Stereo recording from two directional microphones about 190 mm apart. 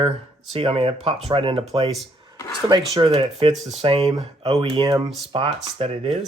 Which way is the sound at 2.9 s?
30° right (ahead or behind).